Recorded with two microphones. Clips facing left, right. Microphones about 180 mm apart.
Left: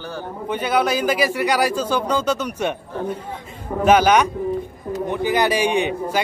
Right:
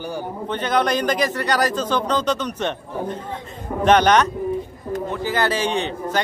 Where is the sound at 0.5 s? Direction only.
10° left (ahead or behind).